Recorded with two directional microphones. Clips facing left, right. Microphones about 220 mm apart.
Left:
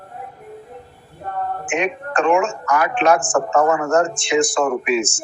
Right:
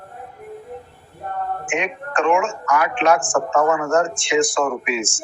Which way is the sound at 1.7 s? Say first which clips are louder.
Left 3 dB; 40° left (ahead or behind).